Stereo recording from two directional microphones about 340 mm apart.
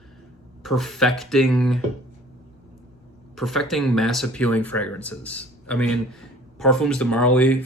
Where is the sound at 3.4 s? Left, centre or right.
Centre.